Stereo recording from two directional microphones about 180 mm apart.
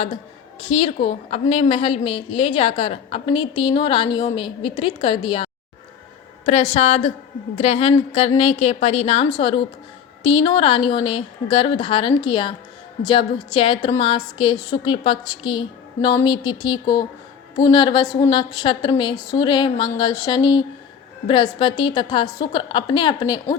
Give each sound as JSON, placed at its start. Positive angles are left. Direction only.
{"t": 0.7, "sound": "a woman's voice", "side_deg": 35}